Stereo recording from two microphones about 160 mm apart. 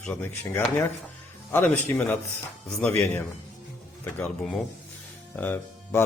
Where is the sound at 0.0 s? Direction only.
10° left (ahead or behind).